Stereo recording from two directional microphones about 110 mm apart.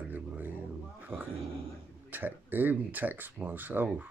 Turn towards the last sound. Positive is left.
turn(degrees=-15)  # may be behind; listen again after turning